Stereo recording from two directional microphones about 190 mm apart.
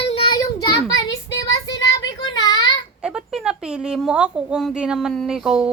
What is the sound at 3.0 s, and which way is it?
A woman's voice, 5° right (ahead or behind).